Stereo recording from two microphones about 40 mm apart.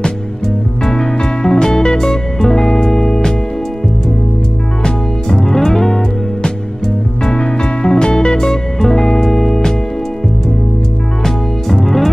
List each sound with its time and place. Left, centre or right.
0.8 s music: centre
4.8 s music: centre
7.2 s music: left
11.2 s music: centre